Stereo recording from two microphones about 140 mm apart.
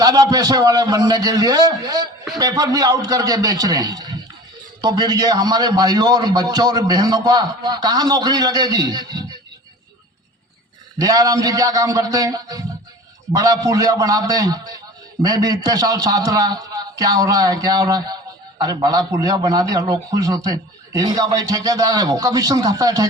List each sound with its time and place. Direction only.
0.0 s a man's voice: 25° right (ahead or behind)
11.0 s a man's voice: 25° right (ahead or behind)